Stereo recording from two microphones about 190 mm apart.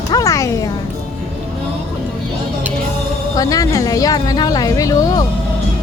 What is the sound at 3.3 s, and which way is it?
A woman's voice, 20° left (ahead or behind).